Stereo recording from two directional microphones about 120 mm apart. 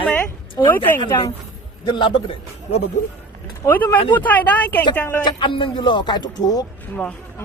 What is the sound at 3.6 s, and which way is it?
Speech, 15° left (ahead or behind).